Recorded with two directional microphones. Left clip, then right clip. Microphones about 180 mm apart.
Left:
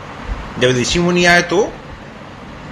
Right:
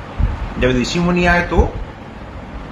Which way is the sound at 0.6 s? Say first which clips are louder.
Left 3 dB; 35° left (ahead or behind).